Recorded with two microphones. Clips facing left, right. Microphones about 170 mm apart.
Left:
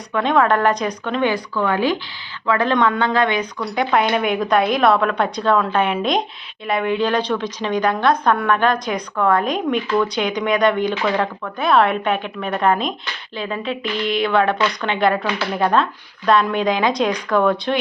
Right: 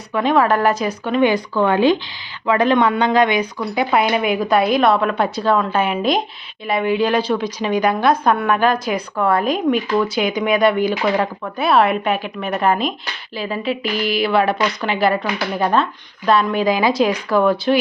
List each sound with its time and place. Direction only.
0.1 s speech: 5° right (ahead or behind)
1.3 s a woman's voice: 25° right (ahead or behind); by 17.7 s 5° right (ahead or behind)